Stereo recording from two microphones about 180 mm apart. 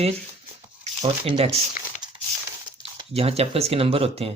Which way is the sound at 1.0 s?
35° right (ahead or behind).